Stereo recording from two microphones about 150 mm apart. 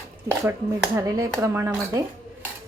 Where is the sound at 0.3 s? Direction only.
10° right (ahead or behind).